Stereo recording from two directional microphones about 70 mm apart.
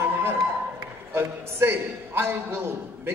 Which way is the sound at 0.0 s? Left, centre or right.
Right.